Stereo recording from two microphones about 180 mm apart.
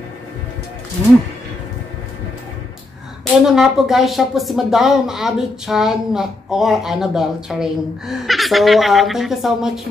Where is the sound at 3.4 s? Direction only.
Centre (ahead or behind).